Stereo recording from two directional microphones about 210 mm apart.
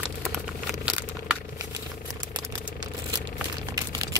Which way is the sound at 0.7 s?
5° right (ahead or behind).